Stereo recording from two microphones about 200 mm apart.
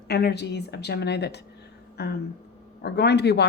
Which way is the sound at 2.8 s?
55° left (ahead or behind).